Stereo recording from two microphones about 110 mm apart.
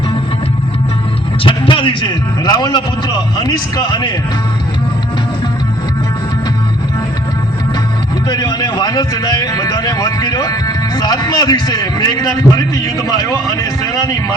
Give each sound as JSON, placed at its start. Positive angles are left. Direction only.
{"t": 1.5, "sound": "a man's voice", "side_deg": 50}
{"t": 8.3, "sound": "a man's voice", "side_deg": 40}